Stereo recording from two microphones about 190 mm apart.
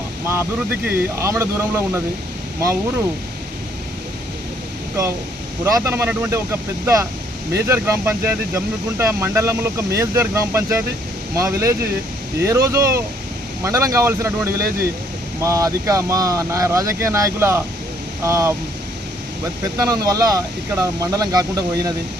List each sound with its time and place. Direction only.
0.3 s speech: 15° right (ahead or behind)
5.6 s speech: 15° right (ahead or behind)
19.7 s speech: 20° right (ahead or behind)